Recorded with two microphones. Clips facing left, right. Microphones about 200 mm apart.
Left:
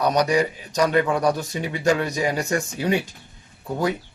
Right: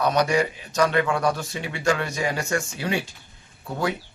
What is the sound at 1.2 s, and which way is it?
Speech, 40° left (ahead or behind).